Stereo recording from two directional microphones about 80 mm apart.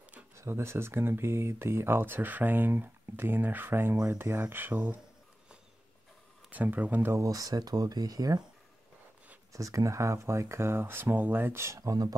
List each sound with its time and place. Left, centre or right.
0.4 s speech: right
6.5 s speech: right
7.1 s speech: right
9.5 s speech: right
11.9 s speech: right